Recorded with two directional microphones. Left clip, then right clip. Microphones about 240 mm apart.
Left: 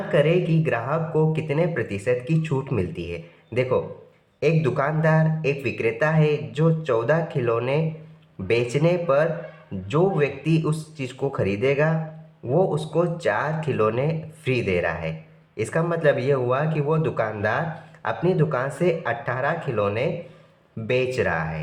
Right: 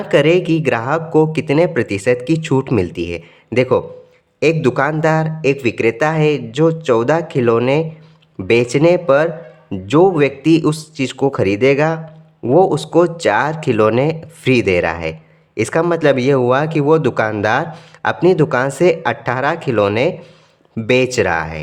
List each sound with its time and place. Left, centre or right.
0.1 s speech: right